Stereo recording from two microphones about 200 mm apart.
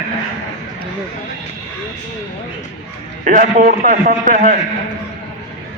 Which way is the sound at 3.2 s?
40° right (ahead or behind).